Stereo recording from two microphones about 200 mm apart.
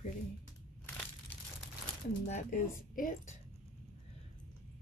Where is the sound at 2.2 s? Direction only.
40° left (ahead or behind).